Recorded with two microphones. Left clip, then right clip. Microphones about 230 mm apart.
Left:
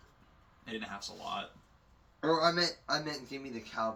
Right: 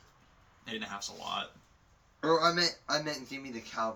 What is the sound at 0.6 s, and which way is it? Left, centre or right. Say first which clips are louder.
Speech: right 2 dB; centre.